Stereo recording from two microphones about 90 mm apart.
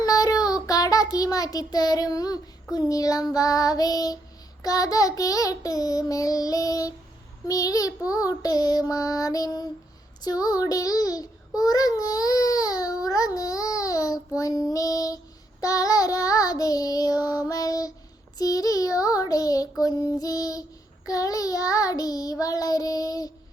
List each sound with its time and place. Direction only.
0.0 s child singing: 40° left (ahead or behind)
2.7 s a child's voice: 40° left (ahead or behind)